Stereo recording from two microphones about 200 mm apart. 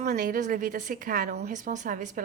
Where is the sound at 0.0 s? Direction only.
40° right (ahead or behind).